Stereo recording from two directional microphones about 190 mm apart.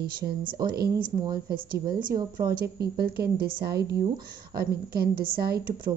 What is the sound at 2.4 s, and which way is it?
A woman's voice, 55° right (ahead or behind).